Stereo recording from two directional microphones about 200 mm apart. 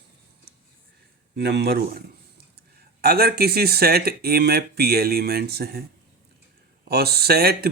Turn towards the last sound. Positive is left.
turn(degrees=-50)  # may be behind; listen again after turning